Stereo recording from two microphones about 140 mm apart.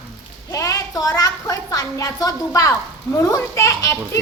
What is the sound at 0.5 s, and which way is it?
A woman's voice, 25° left (ahead or behind).